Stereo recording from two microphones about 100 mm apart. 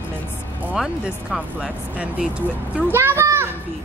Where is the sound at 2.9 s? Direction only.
25° right (ahead or behind).